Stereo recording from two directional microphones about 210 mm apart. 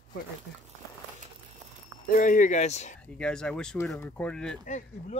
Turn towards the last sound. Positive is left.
turn(degrees=35)  # may be behind; listen again after turning